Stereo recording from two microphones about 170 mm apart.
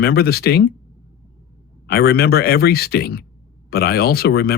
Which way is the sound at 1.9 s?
65° left (ahead or behind).